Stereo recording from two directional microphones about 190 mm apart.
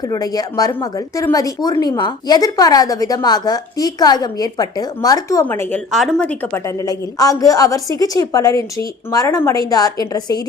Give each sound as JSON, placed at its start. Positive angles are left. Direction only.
{"t": 0.1, "sound": "speech", "side_deg": 20}
{"t": 5.9, "sound": "speech", "side_deg": 0}
{"t": 6.8, "sound": "speech", "side_deg": 20}